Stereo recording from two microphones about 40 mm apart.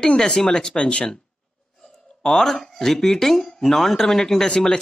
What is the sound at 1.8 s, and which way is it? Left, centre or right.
Speech, centre.